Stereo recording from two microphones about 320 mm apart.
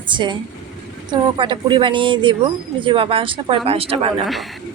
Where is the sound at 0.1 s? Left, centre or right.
Centre.